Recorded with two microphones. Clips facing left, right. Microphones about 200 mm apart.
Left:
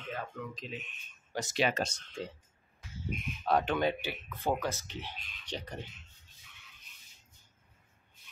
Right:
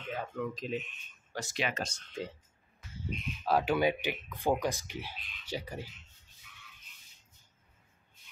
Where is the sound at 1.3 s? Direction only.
20° left (ahead or behind).